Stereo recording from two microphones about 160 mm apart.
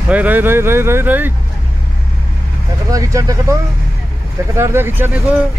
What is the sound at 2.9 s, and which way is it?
Speech, 20° right (ahead or behind).